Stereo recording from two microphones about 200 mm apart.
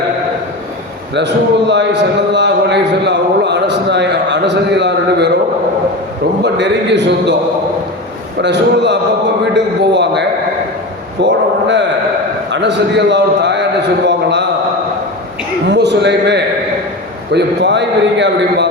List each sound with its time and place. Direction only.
1.1 s a man's voice: 60° right (ahead or behind)
6.4 s a man's voice: 60° right (ahead or behind)
8.4 s a man's voice: 60° right (ahead or behind)
15.7 s a man's voice: 60° right (ahead or behind)